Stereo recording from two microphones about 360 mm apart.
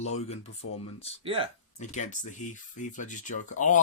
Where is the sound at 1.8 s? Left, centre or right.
Centre.